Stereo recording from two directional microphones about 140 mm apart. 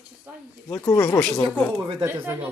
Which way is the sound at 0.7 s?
20° left (ahead or behind).